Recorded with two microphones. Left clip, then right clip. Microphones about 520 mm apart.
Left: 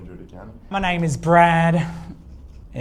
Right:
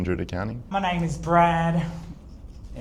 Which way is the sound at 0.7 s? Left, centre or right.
Left.